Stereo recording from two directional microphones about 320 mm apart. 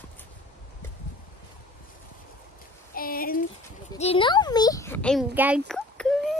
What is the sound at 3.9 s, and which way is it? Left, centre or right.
A child's voice, centre.